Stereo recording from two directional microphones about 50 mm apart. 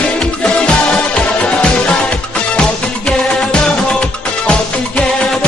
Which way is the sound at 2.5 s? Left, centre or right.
Centre.